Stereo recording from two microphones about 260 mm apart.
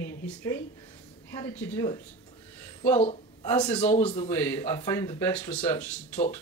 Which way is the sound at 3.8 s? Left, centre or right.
Centre.